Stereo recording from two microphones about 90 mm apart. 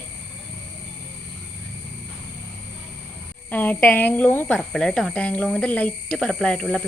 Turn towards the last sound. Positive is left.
turn(degrees=10)  # may be behind; listen again after turning